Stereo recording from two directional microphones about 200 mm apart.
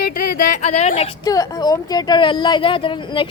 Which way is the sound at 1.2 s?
20° left (ahead or behind).